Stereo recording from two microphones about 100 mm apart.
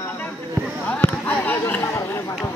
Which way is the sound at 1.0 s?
20° left (ahead or behind).